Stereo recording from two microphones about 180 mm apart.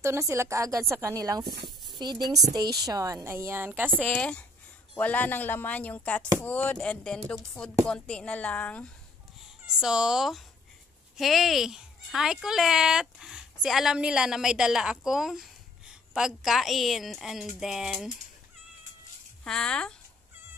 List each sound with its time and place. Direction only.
0.0 s a woman's voice: 15° right (ahead or behind)
1.4 s speech: 60° right (ahead or behind)
2.0 s a woman's voice: 25° right (ahead or behind); by 4.3 s 5° right (ahead or behind)
4.9 s speech: 10° left (ahead or behind)
9.4 s speech: 5° right (ahead or behind)
19.4 s speech: 5° left (ahead or behind)